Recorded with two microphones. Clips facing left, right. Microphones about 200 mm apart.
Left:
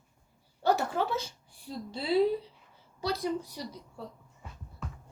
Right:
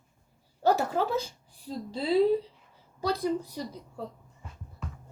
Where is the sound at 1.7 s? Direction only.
40° right (ahead or behind).